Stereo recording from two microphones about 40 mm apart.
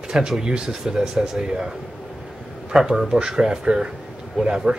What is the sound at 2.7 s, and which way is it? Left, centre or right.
Speech, centre.